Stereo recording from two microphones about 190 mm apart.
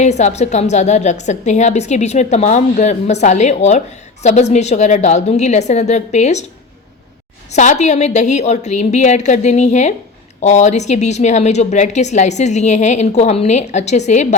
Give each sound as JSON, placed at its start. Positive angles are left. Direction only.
{"t": 0.0, "sound": "a woman's voice", "side_deg": 35}
{"t": 7.5, "sound": "a woman's voice", "side_deg": 40}